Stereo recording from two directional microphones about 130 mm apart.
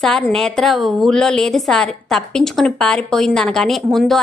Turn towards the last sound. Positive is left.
turn(degrees=0)  # may be behind; listen again after turning